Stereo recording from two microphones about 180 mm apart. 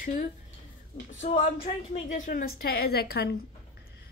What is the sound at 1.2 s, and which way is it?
Speech, 40° left (ahead or behind).